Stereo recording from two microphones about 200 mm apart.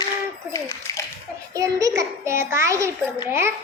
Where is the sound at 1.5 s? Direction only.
15° right (ahead or behind).